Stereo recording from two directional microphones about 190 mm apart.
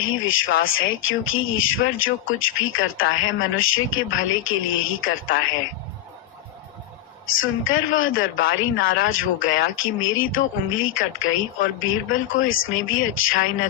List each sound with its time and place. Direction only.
0.0 s speech: 90° left
7.3 s speech: 90° left
8.4 s speech: 50° left (ahead or behind)
9.0 s speech: 90° left